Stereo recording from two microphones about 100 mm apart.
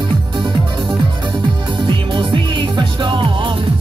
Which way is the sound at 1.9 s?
50° right (ahead or behind).